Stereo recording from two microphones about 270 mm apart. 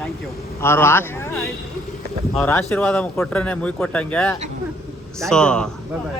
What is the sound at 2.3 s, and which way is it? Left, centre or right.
Speech, centre.